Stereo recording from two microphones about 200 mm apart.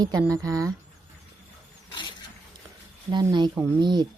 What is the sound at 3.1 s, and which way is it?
Speech, 20° right (ahead or behind).